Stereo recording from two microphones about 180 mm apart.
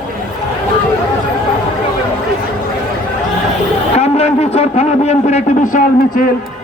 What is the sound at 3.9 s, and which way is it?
A man's voice, 35° left (ahead or behind).